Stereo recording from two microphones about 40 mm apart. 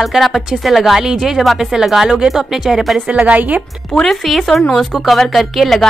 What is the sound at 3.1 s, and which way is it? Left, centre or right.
Speech, right.